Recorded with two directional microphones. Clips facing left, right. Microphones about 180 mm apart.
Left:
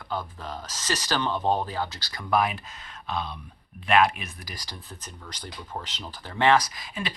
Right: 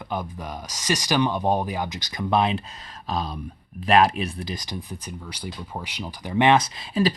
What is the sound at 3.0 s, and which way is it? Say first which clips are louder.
Speech: right 4 dB; 40° right (ahead or behind).